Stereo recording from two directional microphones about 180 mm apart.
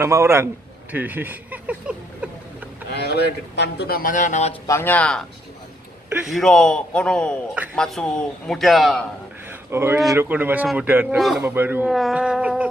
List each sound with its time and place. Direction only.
0.0 s speech: 15° right (ahead or behind)
2.9 s speech: 65° left (ahead or behind); by 4.6 s 40° left (ahead or behind)
4.6 s speech: 10° left (ahead or behind)
6.2 s a man's voice: centre (ahead or behind)
9.7 s a man's voice: 15° right (ahead or behind)
11.4 s a man's voice: 10° right (ahead or behind)